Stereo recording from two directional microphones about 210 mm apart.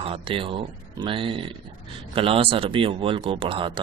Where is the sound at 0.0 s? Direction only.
25° right (ahead or behind).